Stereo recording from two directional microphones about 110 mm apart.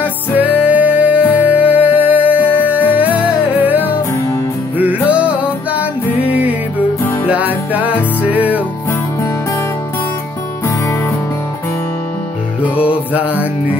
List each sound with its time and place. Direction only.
0.4 s music: 15° right (ahead or behind)
7.2 s music: 15° right (ahead or behind)
12.8 s music: 10° right (ahead or behind)